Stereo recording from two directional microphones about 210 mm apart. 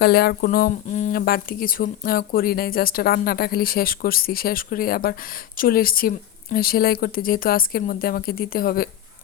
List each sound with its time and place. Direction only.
0.0 s speech: 50° left (ahead or behind)